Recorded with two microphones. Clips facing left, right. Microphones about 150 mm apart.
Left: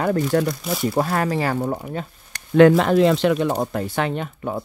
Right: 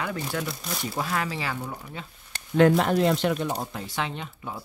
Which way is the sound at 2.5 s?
85° left.